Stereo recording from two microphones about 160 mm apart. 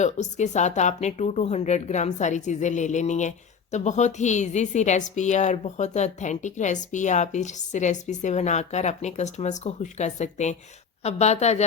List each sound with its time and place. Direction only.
0.0 s speech: 45° left (ahead or behind)